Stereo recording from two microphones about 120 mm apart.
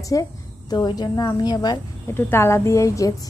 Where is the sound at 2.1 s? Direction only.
20° left (ahead or behind).